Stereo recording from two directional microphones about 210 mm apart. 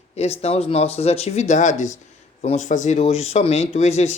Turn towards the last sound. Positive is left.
turn(degrees=30)  # may be behind; listen again after turning